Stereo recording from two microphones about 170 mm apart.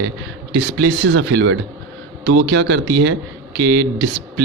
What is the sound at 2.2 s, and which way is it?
Speech, 75° right (ahead or behind).